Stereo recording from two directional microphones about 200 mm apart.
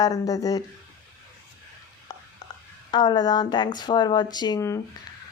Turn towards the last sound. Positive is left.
turn(degrees=15)  # may be behind; listen again after turning